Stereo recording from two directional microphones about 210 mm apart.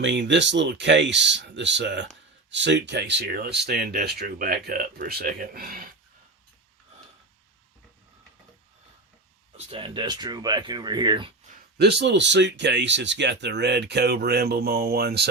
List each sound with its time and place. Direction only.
0.0 s speech: 55° right (ahead or behind)
9.6 s speech: 25° right (ahead or behind)
11.5 s speech: 50° right (ahead or behind)